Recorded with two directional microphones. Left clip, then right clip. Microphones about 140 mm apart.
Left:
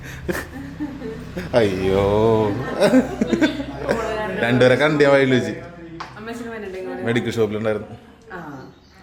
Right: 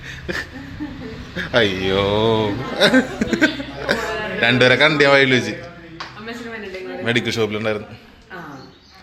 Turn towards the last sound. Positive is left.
turn(degrees=15)  # may be behind; listen again after turning